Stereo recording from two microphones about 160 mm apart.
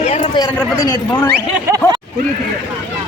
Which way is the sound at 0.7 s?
20° left (ahead or behind).